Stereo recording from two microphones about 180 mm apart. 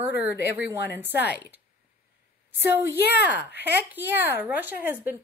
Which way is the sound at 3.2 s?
10° right (ahead or behind).